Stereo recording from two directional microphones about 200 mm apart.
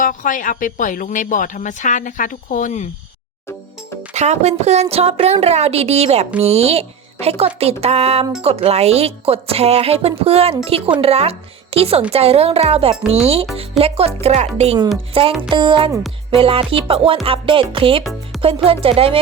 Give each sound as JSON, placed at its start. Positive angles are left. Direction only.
{"t": 0.0, "sound": "a woman's voice", "side_deg": 40}
{"t": 4.1, "sound": "a woman's voice", "side_deg": -35}